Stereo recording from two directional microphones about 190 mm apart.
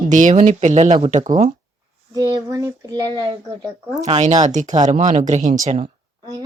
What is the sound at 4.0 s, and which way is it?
Speech, 35° right (ahead or behind).